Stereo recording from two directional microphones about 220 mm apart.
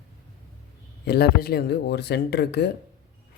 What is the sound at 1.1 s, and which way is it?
Speech, 45° left (ahead or behind).